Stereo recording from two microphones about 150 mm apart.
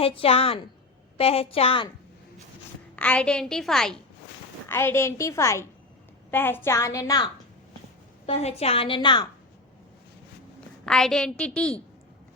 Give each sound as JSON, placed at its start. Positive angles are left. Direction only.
{"t": 0.0, "sound": "a woman's voice", "side_deg": 40}
{"t": 2.9, "sound": "a woman's voice", "side_deg": 10}
{"t": 4.7, "sound": "a woman's voice", "side_deg": 15}
{"t": 8.3, "sound": "a woman's voice", "side_deg": 45}
{"t": 10.8, "sound": "a woman's voice", "side_deg": 5}